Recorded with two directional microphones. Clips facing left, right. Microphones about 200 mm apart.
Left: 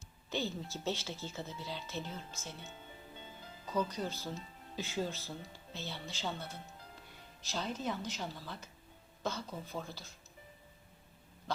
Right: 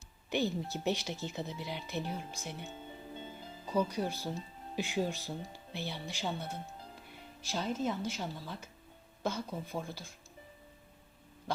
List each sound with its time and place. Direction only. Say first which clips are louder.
0.3 s speech: right 5 dB; 15° right (ahead or behind)
3.7 s speech: right 3 dB; 10° right (ahead or behind)